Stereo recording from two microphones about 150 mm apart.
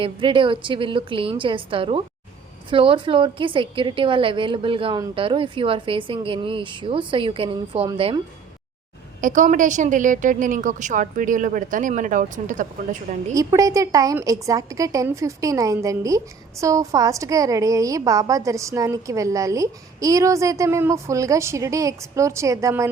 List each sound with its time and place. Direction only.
0.0 s a woman's voice: 35° right (ahead or behind)
9.2 s a woman's voice: 55° right (ahead or behind)
13.3 s a woman's voice: 25° right (ahead or behind)